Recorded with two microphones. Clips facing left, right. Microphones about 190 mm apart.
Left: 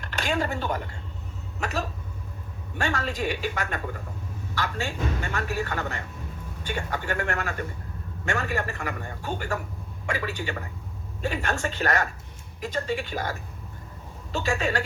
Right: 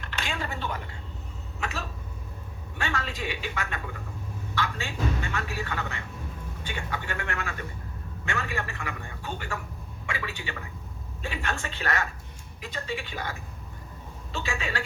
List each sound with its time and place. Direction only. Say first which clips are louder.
0.0 s a sound: left 7 dB; 45° left (ahead or behind)
1.5 s a man's voice: left 5 dB; 45° left (ahead or behind)
14.3 s a man's voice: left 6 dB; 45° left (ahead or behind)